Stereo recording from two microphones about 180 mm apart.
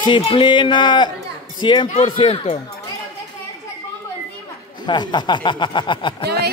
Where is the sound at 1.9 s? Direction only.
35° left (ahead or behind).